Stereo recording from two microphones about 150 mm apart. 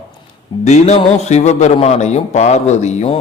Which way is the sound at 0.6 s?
50° left (ahead or behind).